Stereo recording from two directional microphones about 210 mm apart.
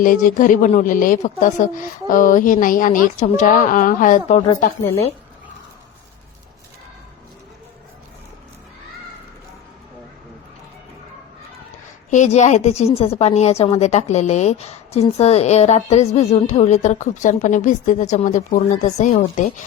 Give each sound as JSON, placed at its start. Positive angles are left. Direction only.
{"t": 0.0, "sound": "a woman's voice", "side_deg": 40}
{"t": 12.1, "sound": "a woman's voice", "side_deg": 35}